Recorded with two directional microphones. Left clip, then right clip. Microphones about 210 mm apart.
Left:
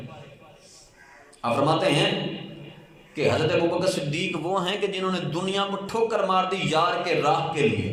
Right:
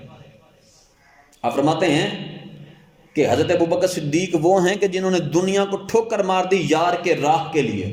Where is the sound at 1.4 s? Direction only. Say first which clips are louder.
Right 3 dB; 40° right (ahead or behind).